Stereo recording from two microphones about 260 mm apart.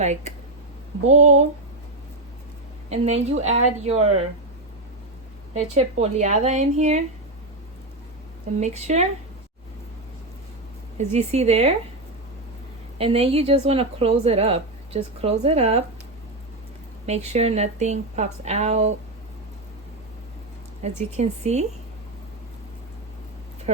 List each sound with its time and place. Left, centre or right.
0.0 s a woman's voice: right
2.9 s a woman's voice: right
5.7 s a woman's voice: right
8.6 s a woman's voice: right
10.9 s a woman's voice: right
13.0 s a woman's voice: right
17.1 s a woman's voice: right
20.8 s a woman's voice: right
23.7 s speech: right